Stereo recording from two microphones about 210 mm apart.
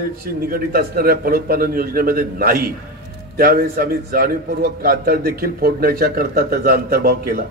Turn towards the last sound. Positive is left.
turn(degrees=-45)  # may be behind; listen again after turning